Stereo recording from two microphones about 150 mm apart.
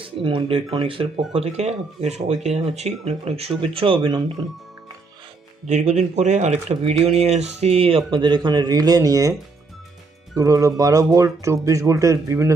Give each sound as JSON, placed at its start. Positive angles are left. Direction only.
{"t": 0.3, "sound": "speech", "side_deg": -35}
{"t": 5.6, "sound": "speech", "side_deg": -50}
{"t": 10.3, "sound": "speech", "side_deg": -20}